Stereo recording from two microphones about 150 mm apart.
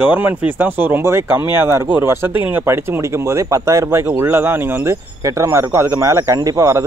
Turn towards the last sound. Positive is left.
turn(degrees=-20)  # may be behind; listen again after turning